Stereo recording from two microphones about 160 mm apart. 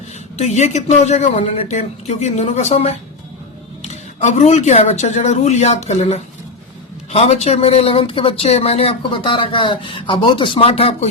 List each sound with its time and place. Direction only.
0.3 s speech: 45° left (ahead or behind)
4.2 s speech: 45° left (ahead or behind)